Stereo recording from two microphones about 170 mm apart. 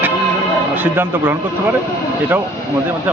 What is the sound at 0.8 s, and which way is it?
Speech, 10° right (ahead or behind).